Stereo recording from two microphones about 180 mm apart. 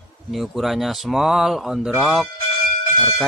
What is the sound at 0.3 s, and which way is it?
Speech, centre (ahead or behind).